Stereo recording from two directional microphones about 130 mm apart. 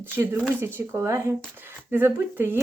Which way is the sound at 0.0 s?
15° right (ahead or behind).